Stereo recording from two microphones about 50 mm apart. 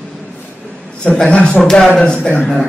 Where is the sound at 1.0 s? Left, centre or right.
Left.